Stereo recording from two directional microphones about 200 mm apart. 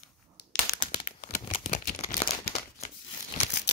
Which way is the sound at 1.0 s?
35° left (ahead or behind).